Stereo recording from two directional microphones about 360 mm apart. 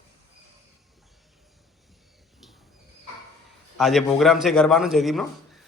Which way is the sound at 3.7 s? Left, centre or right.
Centre.